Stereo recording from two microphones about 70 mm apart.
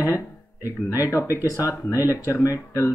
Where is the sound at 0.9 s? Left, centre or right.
Left.